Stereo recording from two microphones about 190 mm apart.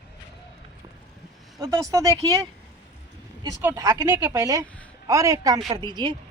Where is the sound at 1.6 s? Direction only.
20° right (ahead or behind).